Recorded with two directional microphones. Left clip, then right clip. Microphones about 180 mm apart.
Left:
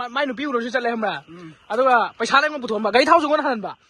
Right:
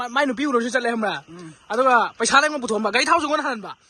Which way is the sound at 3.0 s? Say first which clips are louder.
Left 3 dB; 15° right (ahead or behind).